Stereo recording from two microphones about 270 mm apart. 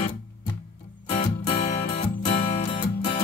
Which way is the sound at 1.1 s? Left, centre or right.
Left.